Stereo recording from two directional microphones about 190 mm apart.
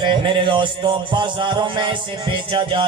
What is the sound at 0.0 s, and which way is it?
Music, 25° right (ahead or behind).